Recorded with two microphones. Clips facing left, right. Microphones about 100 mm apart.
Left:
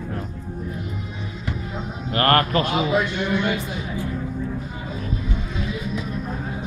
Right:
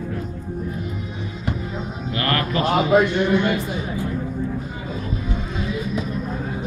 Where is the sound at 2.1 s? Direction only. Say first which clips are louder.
Left 5 dB; 50° left (ahead or behind).